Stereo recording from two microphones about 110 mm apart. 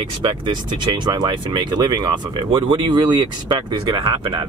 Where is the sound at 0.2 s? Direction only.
45° right (ahead or behind).